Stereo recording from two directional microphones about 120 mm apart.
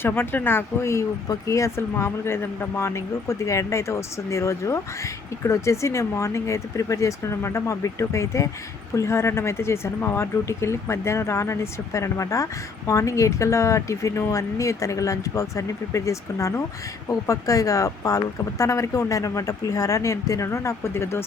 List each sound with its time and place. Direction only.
0.0 s speech: 20° left (ahead or behind)